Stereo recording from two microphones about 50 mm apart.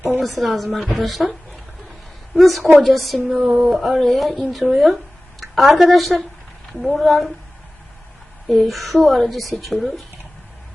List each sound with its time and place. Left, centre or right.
0.2 s a woman's voice: centre
2.4 s a woman's voice: centre
8.4 s a woman's voice: centre